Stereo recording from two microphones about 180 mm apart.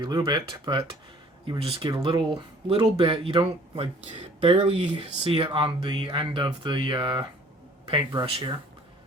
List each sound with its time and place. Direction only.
0.0 s speech: 25° right (ahead or behind)